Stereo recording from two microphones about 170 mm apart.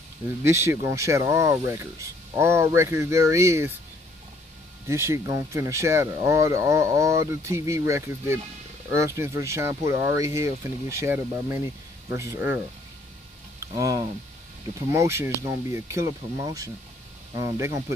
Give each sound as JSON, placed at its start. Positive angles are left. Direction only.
{"t": 0.4, "sound": "speech", "side_deg": -15}
{"t": 4.8, "sound": "speech", "side_deg": -15}
{"t": 13.7, "sound": "speech", "side_deg": -20}